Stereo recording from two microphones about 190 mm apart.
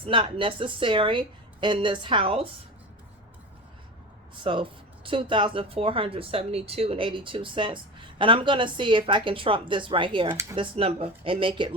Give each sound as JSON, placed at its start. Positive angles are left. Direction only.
{"t": 0.0, "sound": "speech", "side_deg": -25}
{"t": 4.4, "sound": "speech", "side_deg": -25}